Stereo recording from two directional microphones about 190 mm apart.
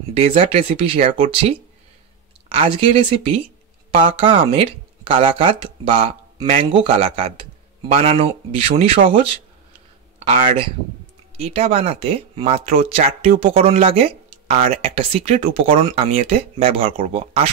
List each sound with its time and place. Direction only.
0.1 s speech: 30° right (ahead or behind)
2.5 s speech: 30° right (ahead or behind)